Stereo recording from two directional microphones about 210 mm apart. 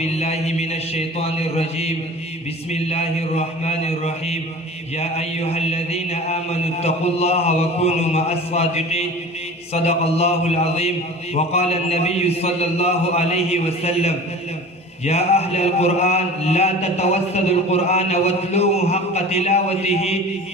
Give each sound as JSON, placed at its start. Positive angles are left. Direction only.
{"t": 0.0, "sound": "a man's voice", "side_deg": 30}
{"t": 4.9, "sound": "mantra", "side_deg": 30}
{"t": 15.0, "sound": "a man's voice", "side_deg": 30}